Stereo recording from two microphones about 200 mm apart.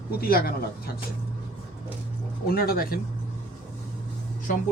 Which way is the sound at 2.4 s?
50° left (ahead or behind).